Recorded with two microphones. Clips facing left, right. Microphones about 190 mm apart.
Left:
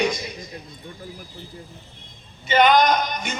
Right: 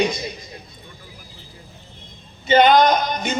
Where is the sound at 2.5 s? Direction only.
30° right (ahead or behind).